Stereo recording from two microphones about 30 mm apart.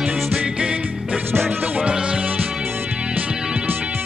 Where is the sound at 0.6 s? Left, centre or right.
Right.